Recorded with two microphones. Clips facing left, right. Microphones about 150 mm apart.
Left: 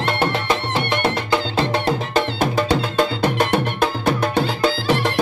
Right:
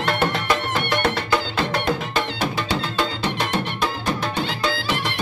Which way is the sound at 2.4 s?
45° left (ahead or behind).